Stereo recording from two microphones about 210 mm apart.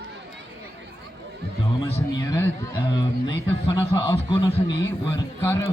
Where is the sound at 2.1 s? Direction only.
15° left (ahead or behind).